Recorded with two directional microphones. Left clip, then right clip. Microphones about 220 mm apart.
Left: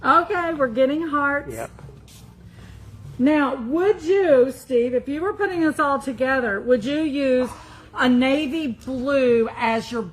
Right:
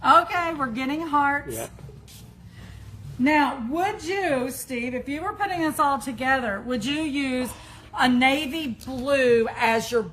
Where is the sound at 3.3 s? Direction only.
50° right (ahead or behind).